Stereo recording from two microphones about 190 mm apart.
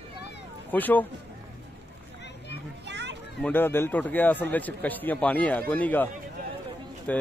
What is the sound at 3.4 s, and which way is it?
A man's voice, 10° left (ahead or behind).